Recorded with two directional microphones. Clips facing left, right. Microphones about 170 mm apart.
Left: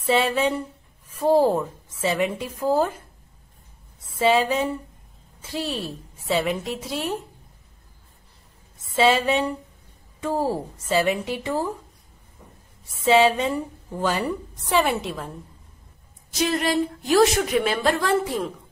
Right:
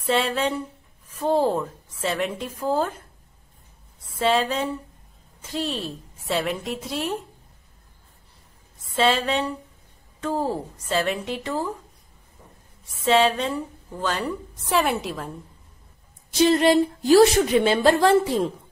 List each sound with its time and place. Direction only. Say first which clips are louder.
0.0 s a woman's voice: left 2 dB; centre (ahead or behind)
4.0 s a woman's voice: left 2 dB; centre (ahead or behind)
8.8 s a woman's voice: left 2 dB; 5° left (ahead or behind)
12.8 s a woman's voice: left 2 dB; centre (ahead or behind)
16.3 s a woman's voice: right 5 dB; 30° right (ahead or behind)